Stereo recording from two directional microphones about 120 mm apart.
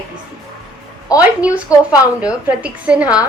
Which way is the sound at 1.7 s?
30° left (ahead or behind).